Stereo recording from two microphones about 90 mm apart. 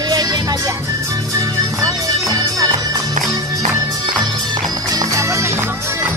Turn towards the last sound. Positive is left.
turn(degrees=-30)  # may be behind; listen again after turning